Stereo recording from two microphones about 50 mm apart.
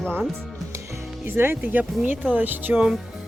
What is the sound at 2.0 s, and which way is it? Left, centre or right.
Speech, right.